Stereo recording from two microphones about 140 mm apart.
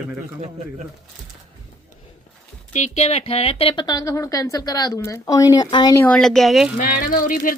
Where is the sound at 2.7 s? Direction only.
55° left (ahead or behind); by 6.0 s 30° left (ahead or behind).